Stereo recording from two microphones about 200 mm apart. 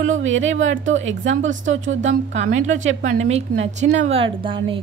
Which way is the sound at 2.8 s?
75° right (ahead or behind).